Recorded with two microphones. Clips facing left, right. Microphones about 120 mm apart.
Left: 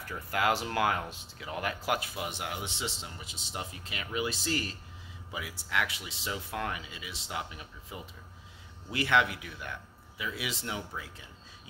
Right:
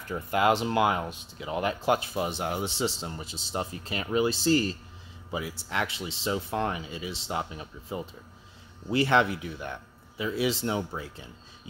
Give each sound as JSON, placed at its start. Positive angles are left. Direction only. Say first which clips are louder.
{"t": 0.1, "sound": "speech", "louder": "right 5 dB", "side_deg": -25}